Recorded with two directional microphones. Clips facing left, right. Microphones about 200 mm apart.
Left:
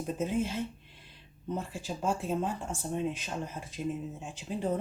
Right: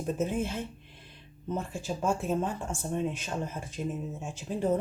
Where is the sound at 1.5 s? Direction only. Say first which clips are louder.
Right 3 dB; 45° right (ahead or behind).